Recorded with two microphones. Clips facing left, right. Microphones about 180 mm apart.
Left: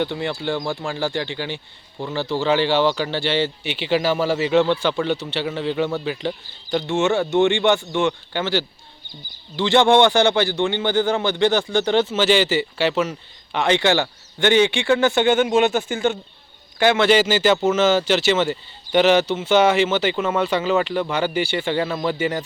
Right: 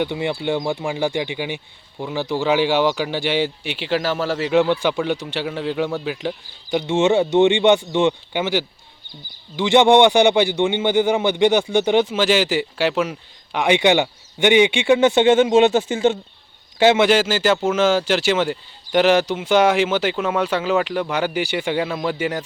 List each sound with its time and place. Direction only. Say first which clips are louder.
0.0 s a man's voice: right 2 dB; 15° right (ahead or behind)
17.1 s a man's voice: left 1 dB; 5° right (ahead or behind)